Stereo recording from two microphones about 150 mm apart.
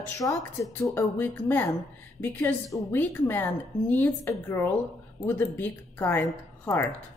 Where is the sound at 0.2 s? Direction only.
20° left (ahead or behind).